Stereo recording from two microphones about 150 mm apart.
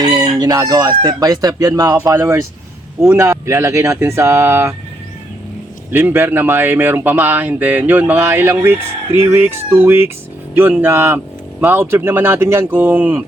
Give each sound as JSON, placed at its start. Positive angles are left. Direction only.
{"t": 0.0, "sound": "chicken", "side_deg": -25}
{"t": 3.0, "sound": "speech", "side_deg": -15}
{"t": 5.9, "sound": "speech", "side_deg": -15}